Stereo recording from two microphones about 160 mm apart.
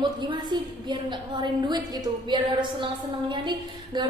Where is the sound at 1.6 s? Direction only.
25° right (ahead or behind).